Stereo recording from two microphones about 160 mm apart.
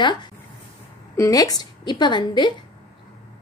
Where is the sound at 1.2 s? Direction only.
20° left (ahead or behind).